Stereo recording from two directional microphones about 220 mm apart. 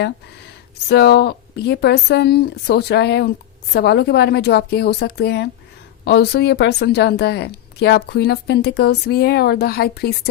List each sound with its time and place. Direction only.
0.9 s a woman's voice: 45° left (ahead or behind)